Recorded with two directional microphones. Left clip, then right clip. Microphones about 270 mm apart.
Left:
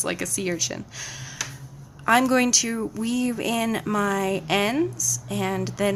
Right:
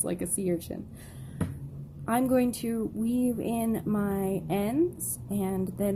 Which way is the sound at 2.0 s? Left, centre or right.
Centre.